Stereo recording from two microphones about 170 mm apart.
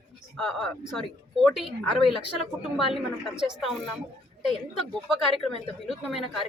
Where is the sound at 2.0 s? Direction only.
30° left (ahead or behind).